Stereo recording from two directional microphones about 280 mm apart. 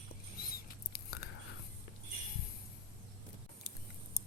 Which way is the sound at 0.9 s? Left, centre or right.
Left.